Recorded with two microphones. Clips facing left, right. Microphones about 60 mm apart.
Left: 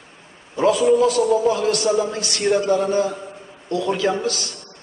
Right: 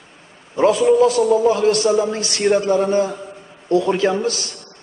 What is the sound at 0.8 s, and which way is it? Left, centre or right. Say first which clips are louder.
A man's voice: right 2 dB; right.